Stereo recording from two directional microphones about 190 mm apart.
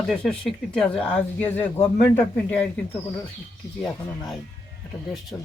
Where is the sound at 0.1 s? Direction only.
5° left (ahead or behind).